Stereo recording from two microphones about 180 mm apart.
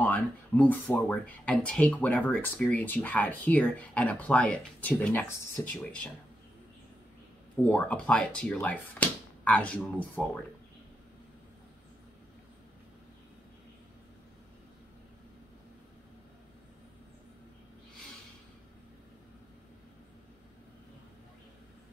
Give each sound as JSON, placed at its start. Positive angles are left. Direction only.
{"t": 0.0, "sound": "speech", "side_deg": 10}
{"t": 7.6, "sound": "speech", "side_deg": 5}